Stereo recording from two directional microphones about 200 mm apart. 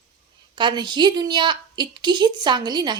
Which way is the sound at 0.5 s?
20° right (ahead or behind).